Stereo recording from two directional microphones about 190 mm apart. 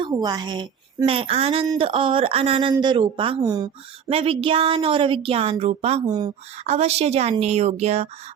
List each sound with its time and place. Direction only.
0.0 s a woman's voice: 20° right (ahead or behind)
6.1 s a woman's voice: 20° right (ahead or behind)
6.7 s a woman's voice: 35° right (ahead or behind)